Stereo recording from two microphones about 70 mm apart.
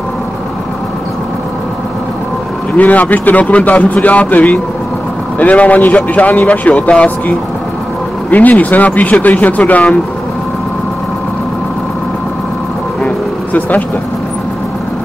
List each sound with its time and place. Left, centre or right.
2.8 s speech: left
13.0 s vehicle: left